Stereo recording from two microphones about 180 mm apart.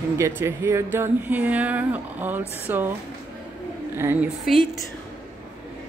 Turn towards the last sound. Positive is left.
turn(degrees=0)  # may be behind; listen again after turning